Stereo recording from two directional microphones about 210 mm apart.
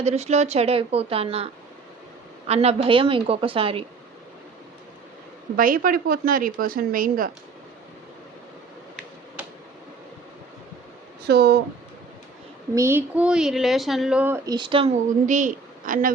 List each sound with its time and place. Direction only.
0.0 s speech: 30° right (ahead or behind)
2.5 s speech: 30° right (ahead or behind)
5.5 s a woman's voice: 40° right (ahead or behind)
11.3 s a woman's voice: 50° right (ahead or behind)
12.7 s speech: 10° right (ahead or behind)
15.3 s a woman's voice: 40° right (ahead or behind)